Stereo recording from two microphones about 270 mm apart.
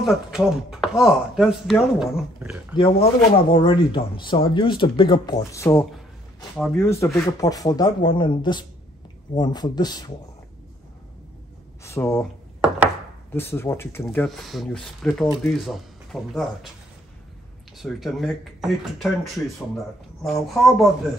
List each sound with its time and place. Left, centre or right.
0.0 s speech: centre
2.7 s speech: centre
11.8 s speech: centre
12.6 s chopping: centre
13.3 s speech: centre
17.7 s speech: centre
20.4 s speech: centre